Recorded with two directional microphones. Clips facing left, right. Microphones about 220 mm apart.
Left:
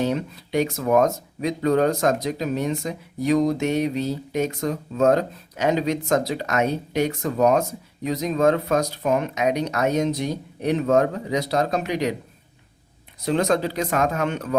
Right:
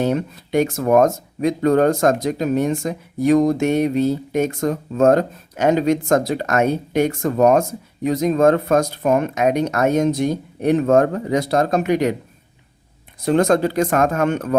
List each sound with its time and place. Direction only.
0.0 s speech: 50° right (ahead or behind)
13.2 s speech: 50° right (ahead or behind)